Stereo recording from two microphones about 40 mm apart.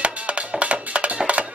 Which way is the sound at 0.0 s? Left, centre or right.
Right.